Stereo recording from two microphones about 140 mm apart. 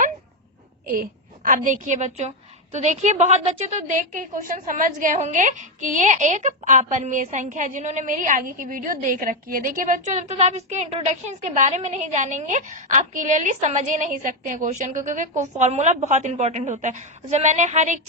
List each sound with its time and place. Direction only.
1.5 s a woman's voice: 70° right (ahead or behind)